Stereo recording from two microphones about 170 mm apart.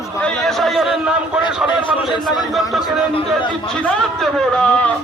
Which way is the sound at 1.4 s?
25° left (ahead or behind).